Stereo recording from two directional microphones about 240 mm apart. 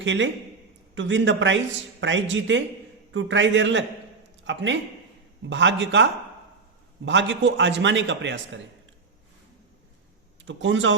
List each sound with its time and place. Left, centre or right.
0.0 s a man's voice: right
10.4 s a man's voice: right